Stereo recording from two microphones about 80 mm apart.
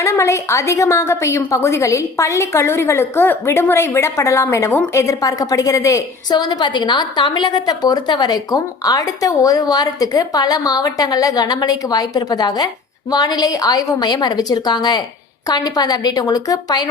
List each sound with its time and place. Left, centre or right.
0.0 s a woman's voice: left
6.3 s a woman's voice: left
14.1 s a woman's voice: left